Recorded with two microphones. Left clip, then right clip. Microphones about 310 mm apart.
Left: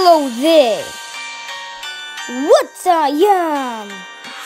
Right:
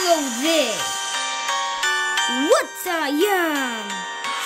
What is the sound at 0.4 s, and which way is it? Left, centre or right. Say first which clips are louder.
Speech: left 9 dB; centre.